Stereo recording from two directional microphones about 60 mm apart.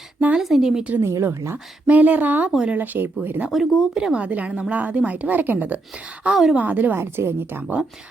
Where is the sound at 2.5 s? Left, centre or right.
Centre.